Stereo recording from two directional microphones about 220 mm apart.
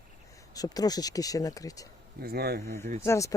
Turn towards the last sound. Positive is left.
turn(degrees=10)  # may be behind; listen again after turning